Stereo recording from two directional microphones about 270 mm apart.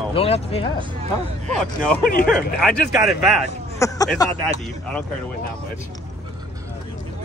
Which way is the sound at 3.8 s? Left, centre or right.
Centre.